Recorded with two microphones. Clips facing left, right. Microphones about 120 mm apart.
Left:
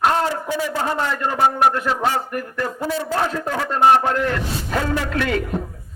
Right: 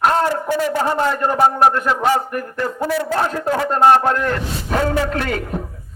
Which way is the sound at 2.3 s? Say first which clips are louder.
Right 2 dB; 45° right (ahead or behind).